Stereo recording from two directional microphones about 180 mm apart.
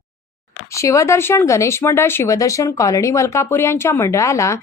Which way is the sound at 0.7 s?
15° left (ahead or behind).